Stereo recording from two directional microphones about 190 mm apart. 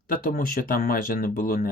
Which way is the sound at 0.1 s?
50° left (ahead or behind).